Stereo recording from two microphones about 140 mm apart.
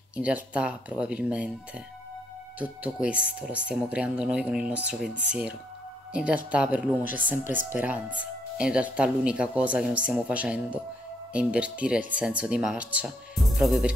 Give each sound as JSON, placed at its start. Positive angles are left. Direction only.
{"t": 0.1, "sound": "speech", "side_deg": -10}
{"t": 2.6, "sound": "speech", "side_deg": -10}